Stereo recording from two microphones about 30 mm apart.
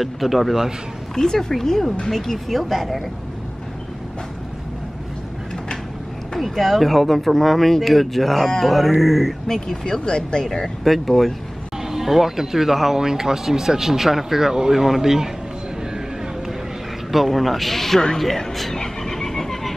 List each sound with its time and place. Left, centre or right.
0.0 s speech: centre
1.1 s speech: centre
6.4 s speech: centre
10.0 s speech: left
10.4 s speech: centre
10.8 s speech: centre
11.9 s speech: centre
17.3 s speech: centre
18.2 s a sound: centre